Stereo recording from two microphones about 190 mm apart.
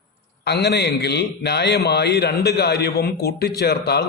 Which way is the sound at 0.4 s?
60° left (ahead or behind).